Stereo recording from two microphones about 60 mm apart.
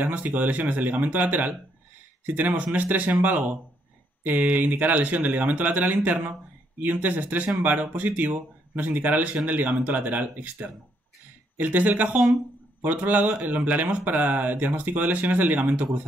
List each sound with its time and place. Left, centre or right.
0.0 s speech: right